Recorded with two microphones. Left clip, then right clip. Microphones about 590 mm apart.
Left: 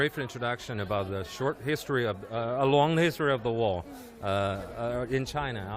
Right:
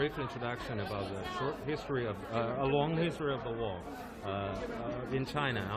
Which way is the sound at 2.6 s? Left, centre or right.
Left.